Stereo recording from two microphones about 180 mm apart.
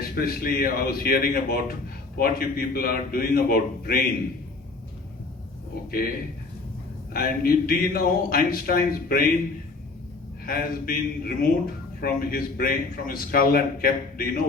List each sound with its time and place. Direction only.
0.2 s speech: 55° left (ahead or behind)
7.1 s speech: 55° left (ahead or behind)
10.4 s speech: 55° left (ahead or behind)